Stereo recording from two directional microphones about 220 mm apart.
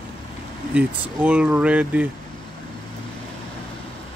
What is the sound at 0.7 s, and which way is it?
Speech, 5° right (ahead or behind).